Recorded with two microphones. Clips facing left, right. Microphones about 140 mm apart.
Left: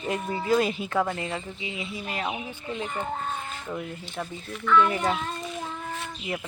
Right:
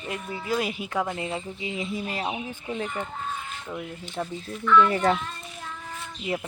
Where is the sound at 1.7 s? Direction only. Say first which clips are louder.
Right 3 dB; 40° right (ahead or behind).